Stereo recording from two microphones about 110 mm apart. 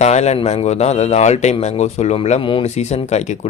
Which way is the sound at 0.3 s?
80° left.